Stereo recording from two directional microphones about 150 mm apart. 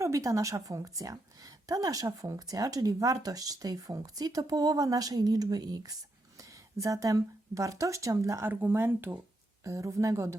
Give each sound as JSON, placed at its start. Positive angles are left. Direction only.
{"t": 0.0, "sound": "a woman's voice", "side_deg": -20}